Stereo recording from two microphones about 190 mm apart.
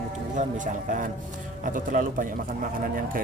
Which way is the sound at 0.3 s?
40° right (ahead or behind).